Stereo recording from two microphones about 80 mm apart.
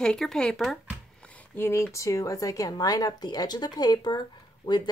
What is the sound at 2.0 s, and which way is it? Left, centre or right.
Speech, left.